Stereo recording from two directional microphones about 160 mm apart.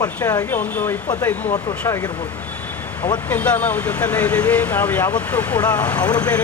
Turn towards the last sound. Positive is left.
turn(degrees=10)  # may be behind; listen again after turning